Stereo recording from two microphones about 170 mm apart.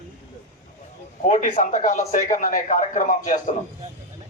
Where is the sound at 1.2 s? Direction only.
50° left (ahead or behind).